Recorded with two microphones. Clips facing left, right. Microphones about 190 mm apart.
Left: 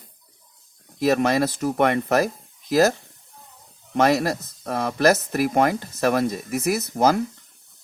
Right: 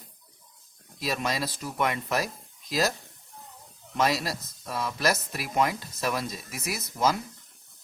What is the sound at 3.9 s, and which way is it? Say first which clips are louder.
Speech: left 7 dB; 55° left (ahead or behind).